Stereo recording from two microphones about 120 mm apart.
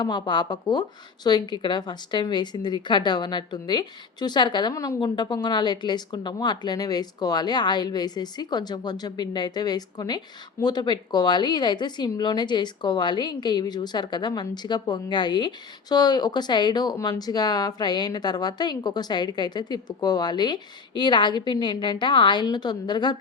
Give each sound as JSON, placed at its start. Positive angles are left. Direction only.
{"t": 0.0, "sound": "a woman's voice", "side_deg": 35}
{"t": 4.7, "sound": "a woman's voice", "side_deg": 25}
{"t": 4.9, "sound": "a woman's voice", "side_deg": 40}